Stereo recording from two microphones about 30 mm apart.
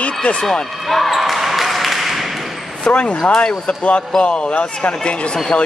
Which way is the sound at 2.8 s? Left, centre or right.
Left.